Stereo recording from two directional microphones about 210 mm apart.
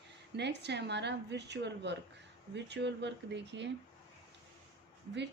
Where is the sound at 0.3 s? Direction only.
55° right (ahead or behind).